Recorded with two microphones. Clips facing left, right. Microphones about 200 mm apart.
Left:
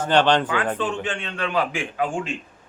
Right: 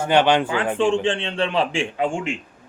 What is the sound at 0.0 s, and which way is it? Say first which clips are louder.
Speech: right 1 dB; 10° right (ahead or behind).